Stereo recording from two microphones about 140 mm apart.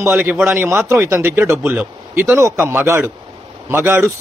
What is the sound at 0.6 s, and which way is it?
Speech, 20° right (ahead or behind).